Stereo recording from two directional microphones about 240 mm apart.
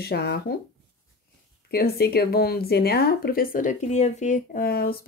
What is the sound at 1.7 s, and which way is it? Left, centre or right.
Speech, left.